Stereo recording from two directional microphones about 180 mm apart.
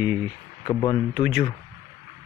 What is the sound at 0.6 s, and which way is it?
Speech, 25° left (ahead or behind).